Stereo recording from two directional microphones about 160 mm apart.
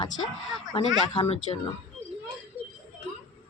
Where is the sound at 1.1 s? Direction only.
35° left (ahead or behind).